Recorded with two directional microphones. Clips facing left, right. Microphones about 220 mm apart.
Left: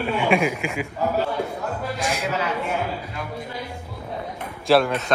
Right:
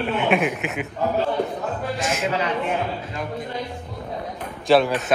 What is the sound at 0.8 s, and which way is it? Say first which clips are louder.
Speech: right 2 dB; 10° left (ahead or behind).